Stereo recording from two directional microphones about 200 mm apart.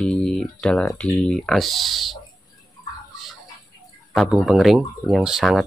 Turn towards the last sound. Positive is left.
turn(degrees=0)  # may be behind; listen again after turning